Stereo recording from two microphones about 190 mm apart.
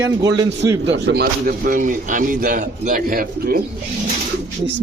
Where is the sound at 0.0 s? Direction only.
20° right (ahead or behind).